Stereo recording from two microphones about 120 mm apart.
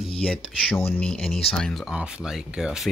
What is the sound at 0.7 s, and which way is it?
Speech, 20° left (ahead or behind).